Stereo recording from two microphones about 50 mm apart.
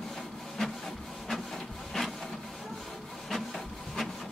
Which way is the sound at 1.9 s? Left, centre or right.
Centre.